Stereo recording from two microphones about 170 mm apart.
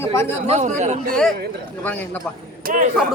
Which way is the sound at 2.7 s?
55° right (ahead or behind).